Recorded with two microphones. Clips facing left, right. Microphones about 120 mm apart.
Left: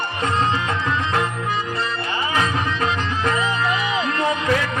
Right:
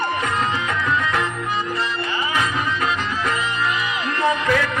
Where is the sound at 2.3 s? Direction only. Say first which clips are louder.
Left 2 dB; 30° left (ahead or behind).